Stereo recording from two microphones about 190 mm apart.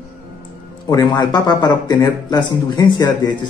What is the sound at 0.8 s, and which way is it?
Speech, 20° left (ahead or behind).